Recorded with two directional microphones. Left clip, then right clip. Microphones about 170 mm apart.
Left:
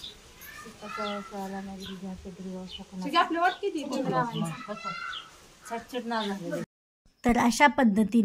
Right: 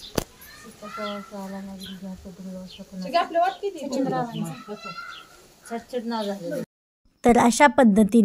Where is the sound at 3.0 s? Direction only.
25° left (ahead or behind).